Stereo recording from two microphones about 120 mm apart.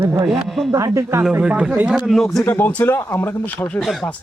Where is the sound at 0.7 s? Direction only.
25° right (ahead or behind).